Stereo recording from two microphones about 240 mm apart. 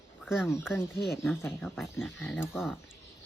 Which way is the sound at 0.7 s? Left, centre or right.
Centre.